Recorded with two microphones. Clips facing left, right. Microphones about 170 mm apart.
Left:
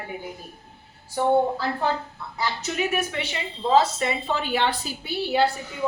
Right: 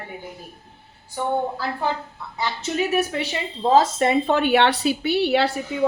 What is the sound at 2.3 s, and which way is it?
A woman's voice, 30° right (ahead or behind).